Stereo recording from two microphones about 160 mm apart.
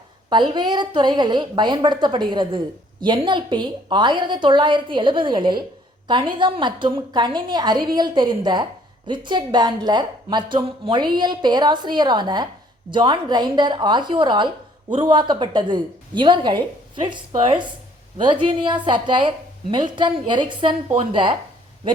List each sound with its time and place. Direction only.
0.3 s a woman's voice: 30° right (ahead or behind)
20.9 s speech: 45° right (ahead or behind)